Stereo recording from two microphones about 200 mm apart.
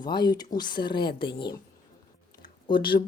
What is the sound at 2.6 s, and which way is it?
Speech, 25° left (ahead or behind).